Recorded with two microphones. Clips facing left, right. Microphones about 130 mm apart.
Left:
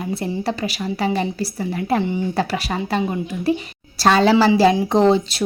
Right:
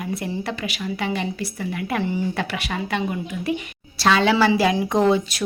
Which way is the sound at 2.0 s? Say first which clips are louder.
Left 2 dB; 20° left (ahead or behind).